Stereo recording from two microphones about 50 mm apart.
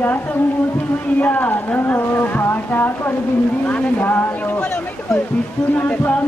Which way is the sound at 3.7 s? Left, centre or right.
Left.